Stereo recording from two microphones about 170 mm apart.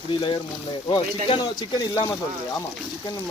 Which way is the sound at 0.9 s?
30° left (ahead or behind).